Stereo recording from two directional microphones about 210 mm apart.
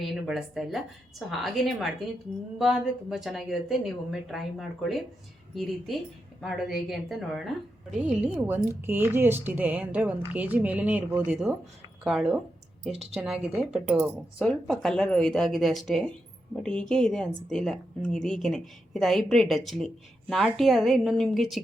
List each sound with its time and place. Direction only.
0.0 s a woman's voice: centre (ahead or behind)
12.9 s speech: 30° right (ahead or behind)
13.1 s a woman's voice: centre (ahead or behind)